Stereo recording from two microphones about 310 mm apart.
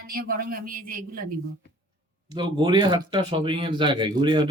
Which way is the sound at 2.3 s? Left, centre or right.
Centre.